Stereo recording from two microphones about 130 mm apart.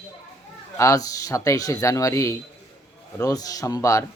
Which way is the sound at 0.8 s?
25° left (ahead or behind).